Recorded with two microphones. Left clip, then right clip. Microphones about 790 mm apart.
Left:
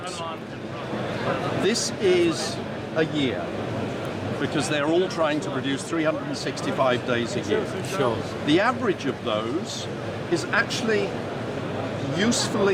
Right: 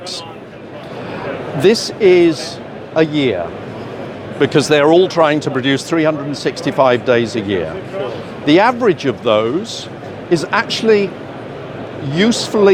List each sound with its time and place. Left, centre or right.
1.6 s speech: right
4.4 s speech: right
12.1 s speech: right